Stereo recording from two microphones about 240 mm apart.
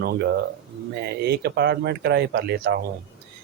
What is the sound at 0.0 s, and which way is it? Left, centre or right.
Speech, right.